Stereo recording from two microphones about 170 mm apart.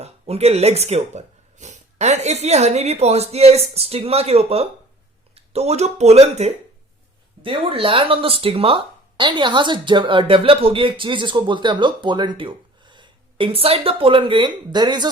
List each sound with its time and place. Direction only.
0.0 s speech: 40° right (ahead or behind)